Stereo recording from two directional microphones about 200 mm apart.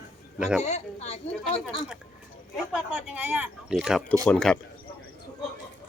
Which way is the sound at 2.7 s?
5° right (ahead or behind).